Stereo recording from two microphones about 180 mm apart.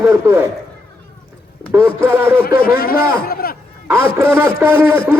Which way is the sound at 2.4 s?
55° left (ahead or behind).